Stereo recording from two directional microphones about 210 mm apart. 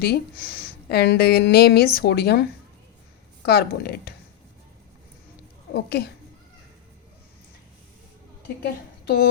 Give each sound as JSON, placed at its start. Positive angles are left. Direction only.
{"t": 0.0, "sound": "speech", "side_deg": 50}
{"t": 5.7, "sound": "speech", "side_deg": 50}
{"t": 8.6, "sound": "a woman's voice", "side_deg": 50}